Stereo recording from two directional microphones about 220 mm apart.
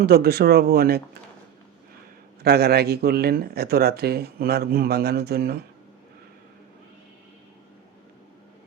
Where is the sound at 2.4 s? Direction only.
45° right (ahead or behind).